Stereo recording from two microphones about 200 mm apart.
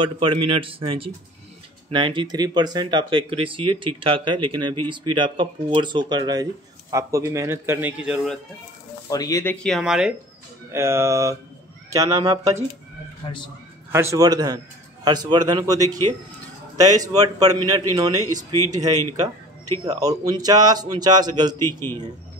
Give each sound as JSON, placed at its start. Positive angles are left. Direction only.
{"t": 0.0, "sound": "speech", "side_deg": -25}
{"t": 9.1, "sound": "speech", "side_deg": 15}
{"t": 10.7, "sound": "speech", "side_deg": -15}
{"t": 13.2, "sound": "a man's voice", "side_deg": 25}
{"t": 13.9, "sound": "speech", "side_deg": -15}
{"t": 19.1, "sound": "a sound", "side_deg": -20}
{"t": 19.8, "sound": "speech", "side_deg": -20}